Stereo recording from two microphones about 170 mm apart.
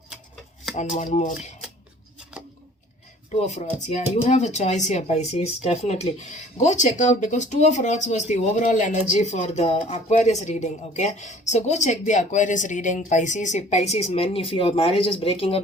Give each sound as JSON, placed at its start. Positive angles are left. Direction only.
{"t": 0.8, "sound": "speech", "side_deg": 45}
{"t": 3.2, "sound": "speech", "side_deg": 45}